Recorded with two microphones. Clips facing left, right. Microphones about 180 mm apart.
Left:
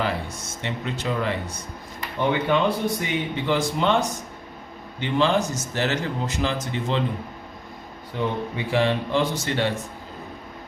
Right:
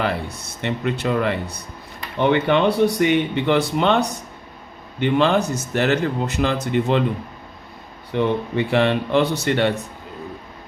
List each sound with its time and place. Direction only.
0.0 s a man's voice: 60° right (ahead or behind)
8.1 s a man's voice: 65° right (ahead or behind)